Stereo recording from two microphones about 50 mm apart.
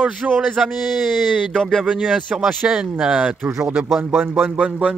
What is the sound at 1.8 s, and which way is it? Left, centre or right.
Speech, centre.